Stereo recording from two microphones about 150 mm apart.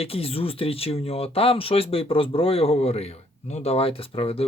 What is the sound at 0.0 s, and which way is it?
Speech, 40° left (ahead or behind).